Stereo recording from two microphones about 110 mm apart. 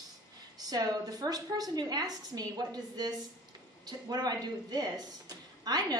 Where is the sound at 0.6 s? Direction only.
35° right (ahead or behind).